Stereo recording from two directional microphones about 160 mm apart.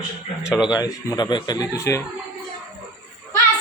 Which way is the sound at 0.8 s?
25° left (ahead or behind).